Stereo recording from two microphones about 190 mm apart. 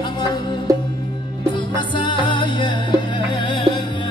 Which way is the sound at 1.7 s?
25° left (ahead or behind).